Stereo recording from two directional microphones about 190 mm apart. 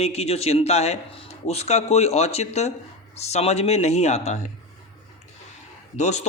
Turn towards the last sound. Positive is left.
turn(degrees=35)  # may be behind; listen again after turning